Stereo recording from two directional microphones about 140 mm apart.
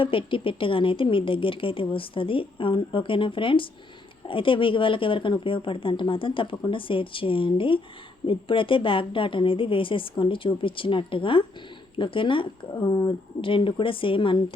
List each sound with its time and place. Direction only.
0.0 s a woman's voice: 40° left (ahead or behind)